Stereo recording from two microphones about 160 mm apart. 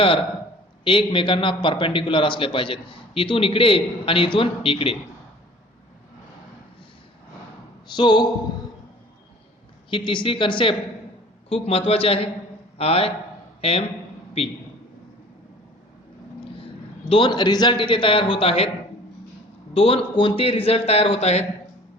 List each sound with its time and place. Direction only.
0.9 s a man's voice: 30° left (ahead or behind)
7.9 s a man's voice: 30° left (ahead or behind)
9.9 s a man's voice: 30° left (ahead or behind)
17.1 s a man's voice: 30° left (ahead or behind)
19.7 s a man's voice: 35° left (ahead or behind)